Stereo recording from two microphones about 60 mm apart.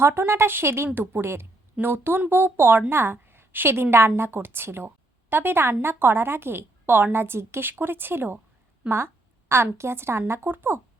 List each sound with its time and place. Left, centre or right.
0.0 s a woman's voice: right
8.8 s speech: right
9.7 s a woman's voice: right